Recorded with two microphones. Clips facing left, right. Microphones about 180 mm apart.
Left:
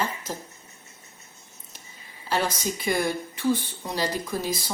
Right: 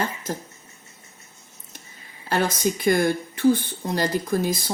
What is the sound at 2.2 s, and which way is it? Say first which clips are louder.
Speech: right 4 dB; 50° right (ahead or behind).